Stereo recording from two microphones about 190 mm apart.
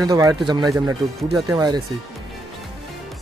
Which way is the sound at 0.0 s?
20° right (ahead or behind).